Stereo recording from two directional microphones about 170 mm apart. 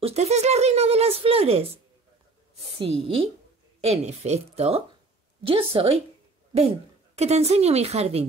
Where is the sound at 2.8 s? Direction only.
35° right (ahead or behind).